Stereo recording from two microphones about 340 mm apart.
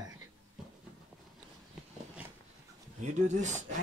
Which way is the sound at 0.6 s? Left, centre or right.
Centre.